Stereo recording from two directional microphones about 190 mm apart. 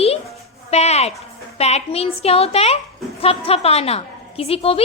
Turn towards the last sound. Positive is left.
turn(degrees=30)  # may be behind; listen again after turning